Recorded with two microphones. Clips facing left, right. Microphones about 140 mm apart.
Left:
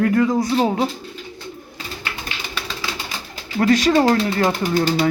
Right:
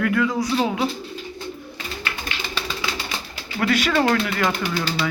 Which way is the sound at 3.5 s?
35° left (ahead or behind).